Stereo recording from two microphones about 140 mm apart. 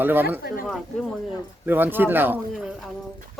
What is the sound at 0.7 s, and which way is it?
Speech, centre (ahead or behind).